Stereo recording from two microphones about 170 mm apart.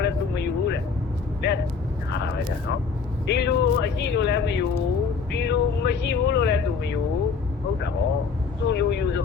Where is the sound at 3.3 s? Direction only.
90° left.